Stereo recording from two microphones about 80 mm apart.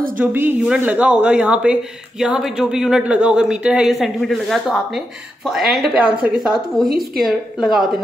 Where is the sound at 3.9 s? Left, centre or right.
Centre.